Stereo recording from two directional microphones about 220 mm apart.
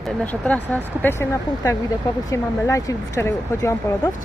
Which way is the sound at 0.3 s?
5° left (ahead or behind).